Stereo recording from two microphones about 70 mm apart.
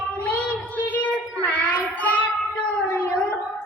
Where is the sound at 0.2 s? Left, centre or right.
Left.